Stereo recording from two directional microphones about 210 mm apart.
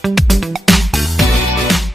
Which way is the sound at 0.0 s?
Centre (ahead or behind).